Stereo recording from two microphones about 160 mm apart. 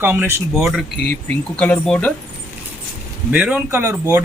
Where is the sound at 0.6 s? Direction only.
Centre (ahead or behind).